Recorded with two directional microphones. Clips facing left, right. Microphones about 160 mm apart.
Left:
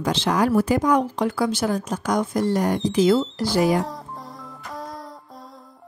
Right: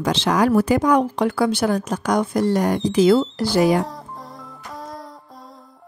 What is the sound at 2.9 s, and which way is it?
Speech, 70° right (ahead or behind).